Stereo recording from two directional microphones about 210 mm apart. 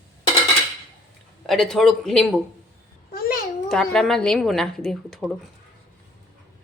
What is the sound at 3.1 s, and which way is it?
Babbling, 45° left (ahead or behind).